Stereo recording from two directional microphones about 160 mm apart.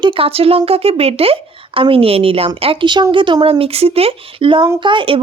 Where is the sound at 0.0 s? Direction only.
35° right (ahead or behind).